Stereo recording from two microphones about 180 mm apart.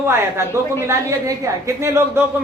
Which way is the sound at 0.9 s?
15° right (ahead or behind).